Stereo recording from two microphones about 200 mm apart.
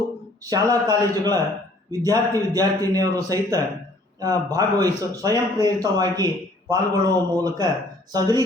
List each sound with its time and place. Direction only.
0.5 s speech: 20° right (ahead or behind)